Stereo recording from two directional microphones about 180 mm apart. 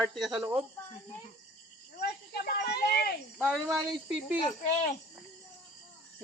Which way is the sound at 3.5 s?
Centre (ahead or behind).